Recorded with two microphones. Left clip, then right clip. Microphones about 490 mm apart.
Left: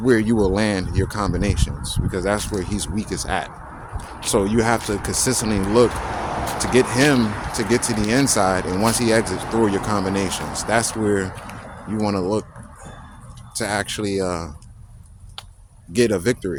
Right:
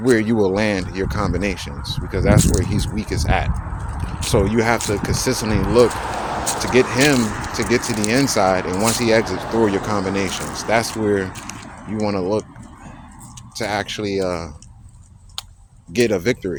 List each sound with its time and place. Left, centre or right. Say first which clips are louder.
0.0 s speech: right 1 dB; left
2.4 s speech: right 5 dB; centre
2.6 s speech: right 2 dB; left
5.9 s speech: right 2 dB; left
13.5 s speech: right 1 dB; left
15.9 s speech: right 1 dB; left